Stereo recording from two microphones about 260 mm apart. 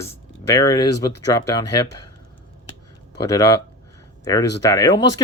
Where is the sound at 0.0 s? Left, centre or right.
Centre.